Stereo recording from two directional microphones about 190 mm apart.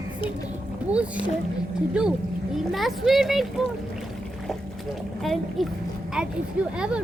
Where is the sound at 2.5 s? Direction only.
Centre (ahead or behind).